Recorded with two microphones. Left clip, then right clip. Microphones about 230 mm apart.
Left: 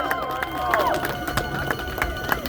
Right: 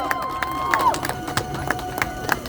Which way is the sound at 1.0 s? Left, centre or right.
Right.